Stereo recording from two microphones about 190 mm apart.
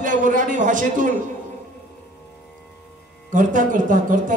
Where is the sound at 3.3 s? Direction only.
45° right (ahead or behind).